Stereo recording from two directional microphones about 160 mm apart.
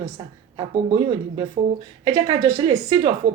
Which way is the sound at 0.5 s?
30° right (ahead or behind).